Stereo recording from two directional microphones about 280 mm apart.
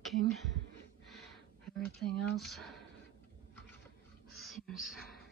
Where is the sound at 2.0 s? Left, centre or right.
Centre.